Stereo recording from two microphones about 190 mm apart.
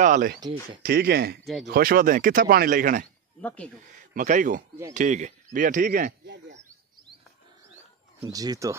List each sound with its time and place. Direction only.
0.0 s a sound: 45° right (ahead or behind)
0.8 s speech: 55° right (ahead or behind)
1.4 s speech: centre (ahead or behind)
1.7 s speech: 50° right (ahead or behind)
3.3 s speech: 5° left (ahead or behind)
4.1 s speech: 45° right (ahead or behind)
8.2 s speech: 20° right (ahead or behind)